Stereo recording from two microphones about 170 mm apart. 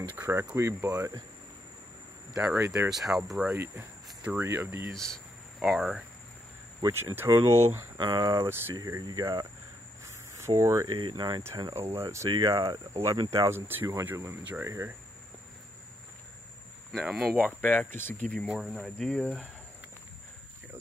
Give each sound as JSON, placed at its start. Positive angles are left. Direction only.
{"t": 0.1, "sound": "speech", "side_deg": -15}
{"t": 2.3, "sound": "speech", "side_deg": -5}
{"t": 2.9, "sound": "cricket", "side_deg": 0}
{"t": 3.5, "sound": "cricket", "side_deg": -15}
{"t": 4.9, "sound": "speech", "side_deg": 5}
{"t": 6.8, "sound": "speech", "side_deg": -20}
{"t": 8.0, "sound": "speech", "side_deg": -25}
{"t": 8.4, "sound": "speech", "side_deg": -15}
{"t": 10.0, "sound": "cricket", "side_deg": -15}
{"t": 11.1, "sound": "speech", "side_deg": -25}
{"t": 16.9, "sound": "cricket", "side_deg": -5}
{"t": 17.6, "sound": "speech", "side_deg": 10}
{"t": 18.5, "sound": "cricket", "side_deg": -5}